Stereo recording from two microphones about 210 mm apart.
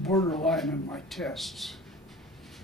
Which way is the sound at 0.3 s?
Centre (ahead or behind).